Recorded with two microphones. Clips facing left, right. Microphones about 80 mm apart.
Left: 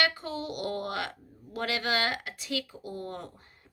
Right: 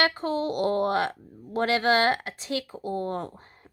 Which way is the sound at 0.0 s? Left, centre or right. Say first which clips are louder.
Right 5 dB; right.